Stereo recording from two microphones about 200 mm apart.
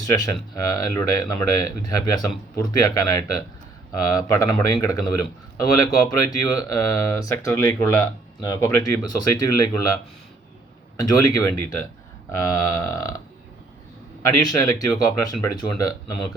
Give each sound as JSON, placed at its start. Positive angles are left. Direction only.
{"t": 0.0, "sound": "speech", "side_deg": 15}
{"t": 11.2, "sound": "speech", "side_deg": 15}